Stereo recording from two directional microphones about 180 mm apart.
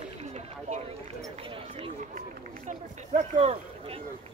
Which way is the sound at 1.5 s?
30° right (ahead or behind).